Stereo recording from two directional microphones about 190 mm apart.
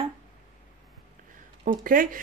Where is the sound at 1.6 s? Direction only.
45° right (ahead or behind).